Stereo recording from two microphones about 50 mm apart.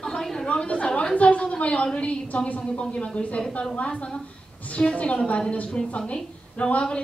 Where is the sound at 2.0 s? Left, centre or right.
Left.